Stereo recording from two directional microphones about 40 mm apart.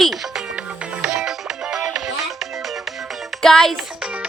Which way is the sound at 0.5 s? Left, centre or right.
Right.